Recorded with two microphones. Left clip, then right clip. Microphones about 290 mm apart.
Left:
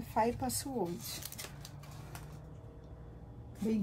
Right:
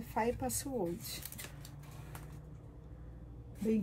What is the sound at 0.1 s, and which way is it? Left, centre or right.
Speech, centre.